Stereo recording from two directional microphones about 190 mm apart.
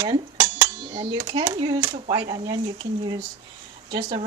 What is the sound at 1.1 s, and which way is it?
Speech, 20° right (ahead or behind).